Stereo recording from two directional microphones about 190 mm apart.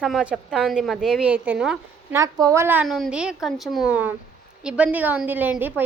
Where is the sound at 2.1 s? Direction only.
15° right (ahead or behind).